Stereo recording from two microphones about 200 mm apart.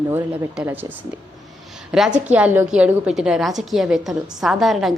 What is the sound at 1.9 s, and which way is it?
A woman's voice, 5° right (ahead or behind).